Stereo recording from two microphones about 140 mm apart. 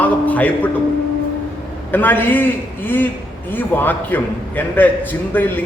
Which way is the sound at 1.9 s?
15° left (ahead or behind).